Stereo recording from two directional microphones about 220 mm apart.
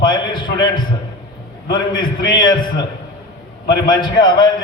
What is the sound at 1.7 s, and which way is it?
Speech, 20° left (ahead or behind).